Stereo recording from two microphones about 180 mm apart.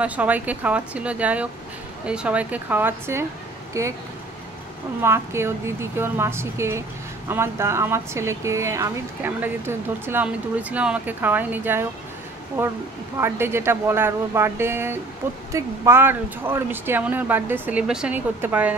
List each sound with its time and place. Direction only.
0.0 s speech: 10° right (ahead or behind)
5.0 s speech: 15° right (ahead or behind)